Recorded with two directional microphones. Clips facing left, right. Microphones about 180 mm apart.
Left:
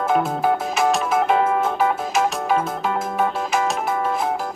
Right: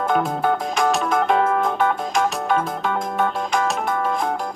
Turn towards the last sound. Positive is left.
turn(degrees=5)  # may be behind; listen again after turning